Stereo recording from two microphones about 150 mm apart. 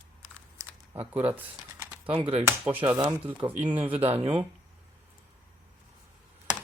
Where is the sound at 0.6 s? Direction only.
20° right (ahead or behind).